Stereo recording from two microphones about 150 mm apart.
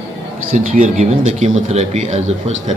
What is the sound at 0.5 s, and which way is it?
Speech, 55° right (ahead or behind).